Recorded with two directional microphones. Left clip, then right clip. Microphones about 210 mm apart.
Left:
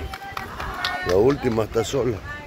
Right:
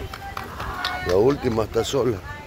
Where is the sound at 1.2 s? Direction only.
5° left (ahead or behind).